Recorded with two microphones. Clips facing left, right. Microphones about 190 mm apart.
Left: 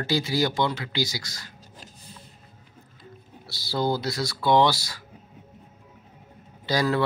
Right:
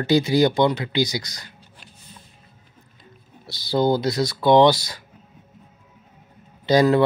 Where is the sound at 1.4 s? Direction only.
40° left (ahead or behind).